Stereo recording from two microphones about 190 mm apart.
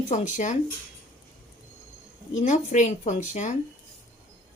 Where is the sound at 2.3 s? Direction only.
40° left (ahead or behind).